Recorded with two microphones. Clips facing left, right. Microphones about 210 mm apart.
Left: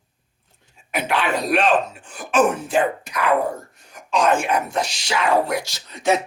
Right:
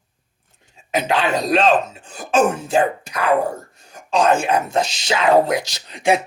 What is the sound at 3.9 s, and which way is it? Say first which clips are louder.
Speech: right 2 dB; 25° right (ahead or behind).